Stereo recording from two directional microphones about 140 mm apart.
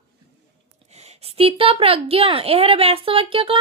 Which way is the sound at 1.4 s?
45° right (ahead or behind).